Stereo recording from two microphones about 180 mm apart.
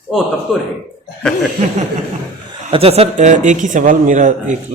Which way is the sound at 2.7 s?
35° right (ahead or behind).